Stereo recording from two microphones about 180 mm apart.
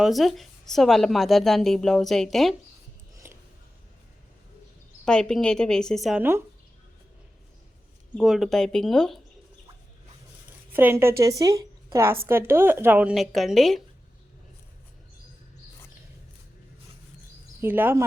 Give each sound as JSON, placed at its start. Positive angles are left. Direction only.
{"t": 0.0, "sound": "a woman's voice", "side_deg": 0}
{"t": 3.2, "sound": "a sound", "side_deg": -10}
{"t": 5.0, "sound": "a woman's voice", "side_deg": 5}
{"t": 8.2, "sound": "a woman's voice", "side_deg": 0}
{"t": 10.7, "sound": "a woman's voice", "side_deg": -10}
{"t": 17.6, "sound": "speech", "side_deg": -10}